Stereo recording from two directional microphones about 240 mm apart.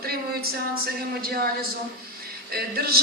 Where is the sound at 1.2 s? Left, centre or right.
Right.